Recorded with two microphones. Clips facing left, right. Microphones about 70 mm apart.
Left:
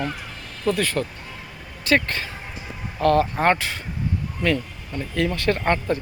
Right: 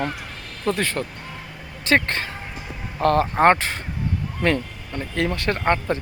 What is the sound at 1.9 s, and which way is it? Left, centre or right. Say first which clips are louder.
Speech: right 1 dB; right.